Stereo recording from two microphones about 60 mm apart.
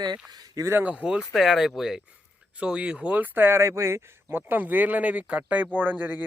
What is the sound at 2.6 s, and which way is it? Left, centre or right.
Speech, centre.